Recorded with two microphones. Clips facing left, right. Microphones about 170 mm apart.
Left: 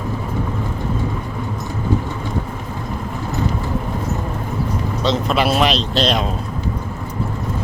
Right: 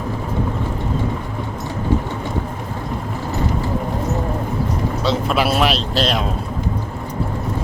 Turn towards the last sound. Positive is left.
turn(degrees=-5)  # may be behind; listen again after turning